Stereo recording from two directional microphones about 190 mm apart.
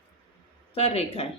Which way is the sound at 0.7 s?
30° left (ahead or behind).